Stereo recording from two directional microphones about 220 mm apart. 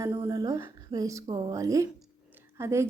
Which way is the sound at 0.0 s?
15° right (ahead or behind).